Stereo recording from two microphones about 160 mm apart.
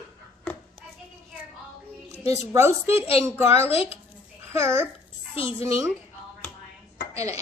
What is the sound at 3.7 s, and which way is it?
Speech, 40° left (ahead or behind).